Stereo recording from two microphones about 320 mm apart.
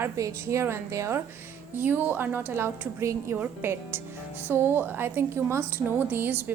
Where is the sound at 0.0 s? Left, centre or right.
Centre.